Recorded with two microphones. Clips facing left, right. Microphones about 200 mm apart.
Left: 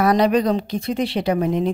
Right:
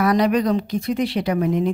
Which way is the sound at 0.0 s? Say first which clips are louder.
Left 1 dB; 30° left (ahead or behind).